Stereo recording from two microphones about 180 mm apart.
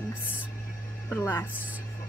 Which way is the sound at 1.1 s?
10° left (ahead or behind).